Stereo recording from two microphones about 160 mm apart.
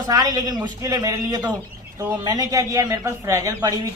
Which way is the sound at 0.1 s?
25° right (ahead or behind).